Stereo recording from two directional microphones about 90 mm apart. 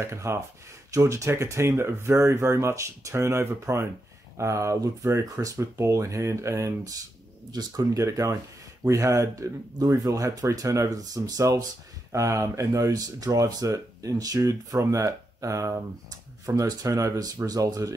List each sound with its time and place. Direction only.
0.0 s speech: 30° right (ahead or behind)